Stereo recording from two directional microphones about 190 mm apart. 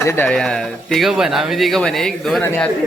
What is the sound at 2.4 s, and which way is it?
Speech, 10° left (ahead or behind).